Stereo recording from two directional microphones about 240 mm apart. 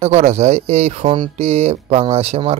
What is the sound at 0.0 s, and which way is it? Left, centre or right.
Speech, right.